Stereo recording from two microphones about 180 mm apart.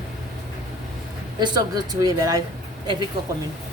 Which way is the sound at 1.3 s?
25° right (ahead or behind).